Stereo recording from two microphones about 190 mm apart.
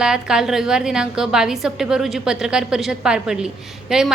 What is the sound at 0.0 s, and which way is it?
A woman's voice, 5° right (ahead or behind).